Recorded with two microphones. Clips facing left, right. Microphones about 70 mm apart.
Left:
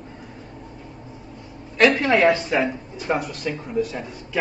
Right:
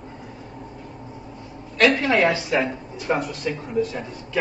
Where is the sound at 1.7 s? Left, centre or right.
Centre.